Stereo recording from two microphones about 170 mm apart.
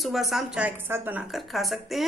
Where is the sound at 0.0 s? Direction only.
Centre (ahead or behind).